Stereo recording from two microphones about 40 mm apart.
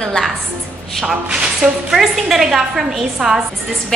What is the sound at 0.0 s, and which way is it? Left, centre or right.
Speech, centre.